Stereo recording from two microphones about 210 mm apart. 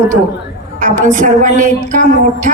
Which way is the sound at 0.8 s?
35° right (ahead or behind).